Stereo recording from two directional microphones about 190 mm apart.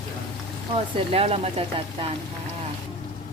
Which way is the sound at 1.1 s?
30° right (ahead or behind).